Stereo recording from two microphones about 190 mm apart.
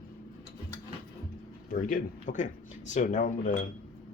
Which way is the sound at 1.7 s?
45° left (ahead or behind).